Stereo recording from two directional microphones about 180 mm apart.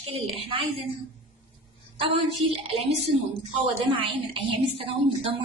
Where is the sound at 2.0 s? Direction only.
30° right (ahead or behind).